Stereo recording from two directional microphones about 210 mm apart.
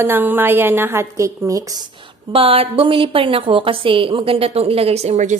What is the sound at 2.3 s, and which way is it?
A woman's voice, 25° right (ahead or behind).